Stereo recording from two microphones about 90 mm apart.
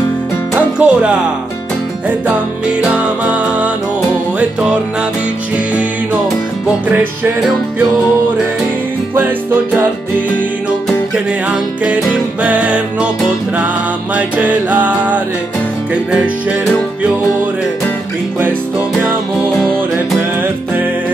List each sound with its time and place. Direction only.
0.7 s music: 10° right (ahead or behind)
3.3 s music: 15° right (ahead or behind)
12.4 s music: 15° right (ahead or behind)
14.1 s music: 15° right (ahead or behind)
19.0 s music: 10° left (ahead or behind)